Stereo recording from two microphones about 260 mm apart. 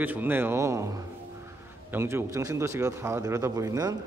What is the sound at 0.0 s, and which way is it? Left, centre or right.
Speech, centre.